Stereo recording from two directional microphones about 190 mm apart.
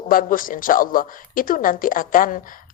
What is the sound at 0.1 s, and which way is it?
Speech, 45° left (ahead or behind).